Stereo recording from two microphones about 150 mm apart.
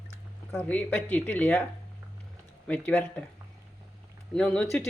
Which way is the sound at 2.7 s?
10° left (ahead or behind).